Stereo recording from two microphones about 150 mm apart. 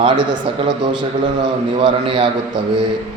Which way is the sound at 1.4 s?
35° right (ahead or behind).